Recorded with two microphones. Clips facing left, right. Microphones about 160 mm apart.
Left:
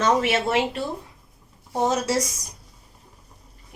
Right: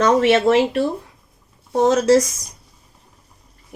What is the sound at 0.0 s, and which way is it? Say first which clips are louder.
Speech: right 7 dB; 75° right (ahead or behind).